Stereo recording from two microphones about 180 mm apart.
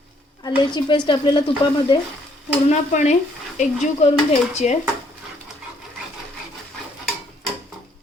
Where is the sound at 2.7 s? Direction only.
40° left (ahead or behind).